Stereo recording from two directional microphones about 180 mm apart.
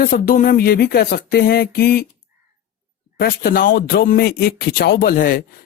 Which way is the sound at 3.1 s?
55° left (ahead or behind).